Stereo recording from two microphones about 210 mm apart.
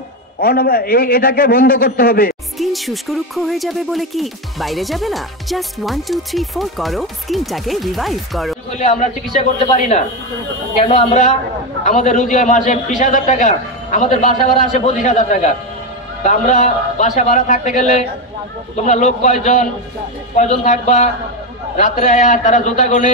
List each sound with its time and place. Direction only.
0.4 s a man's voice: 45° left (ahead or behind)
2.6 s music: centre (ahead or behind)
8.7 s a man's voice: 35° left (ahead or behind)